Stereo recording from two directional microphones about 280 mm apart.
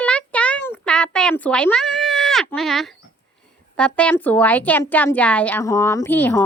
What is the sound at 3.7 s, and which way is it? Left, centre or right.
A woman's voice, centre.